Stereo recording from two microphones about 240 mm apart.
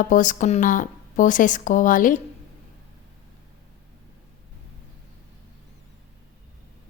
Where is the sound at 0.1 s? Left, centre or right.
Left.